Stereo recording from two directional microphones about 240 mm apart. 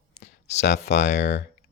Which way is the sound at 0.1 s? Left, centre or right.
Left.